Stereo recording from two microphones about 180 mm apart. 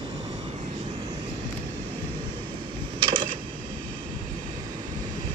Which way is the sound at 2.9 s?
25° right (ahead or behind).